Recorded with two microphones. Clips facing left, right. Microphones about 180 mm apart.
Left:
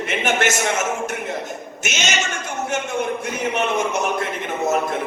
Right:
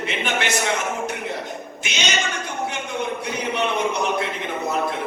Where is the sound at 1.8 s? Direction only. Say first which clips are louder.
Left 3 dB; 45° left (ahead or behind).